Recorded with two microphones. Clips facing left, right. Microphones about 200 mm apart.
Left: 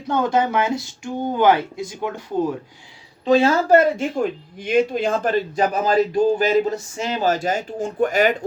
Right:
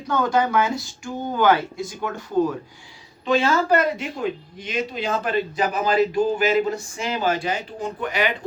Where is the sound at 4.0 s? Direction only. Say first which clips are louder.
Left 4 dB; 50° left (ahead or behind).